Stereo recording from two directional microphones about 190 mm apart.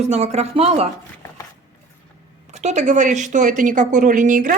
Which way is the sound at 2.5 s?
40° right (ahead or behind).